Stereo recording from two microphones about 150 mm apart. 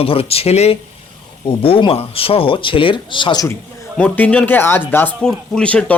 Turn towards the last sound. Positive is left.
turn(degrees=10)  # may be behind; listen again after turning